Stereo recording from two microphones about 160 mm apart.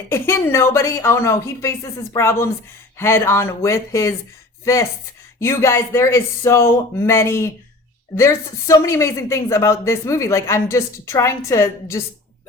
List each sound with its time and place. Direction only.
0.1 s a woman's voice: 15° left (ahead or behind)